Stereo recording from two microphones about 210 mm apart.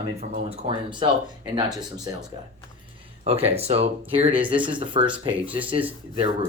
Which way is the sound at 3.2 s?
30° right (ahead or behind).